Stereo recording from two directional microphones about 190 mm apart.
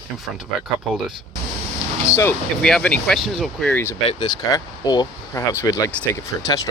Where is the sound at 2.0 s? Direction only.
15° left (ahead or behind).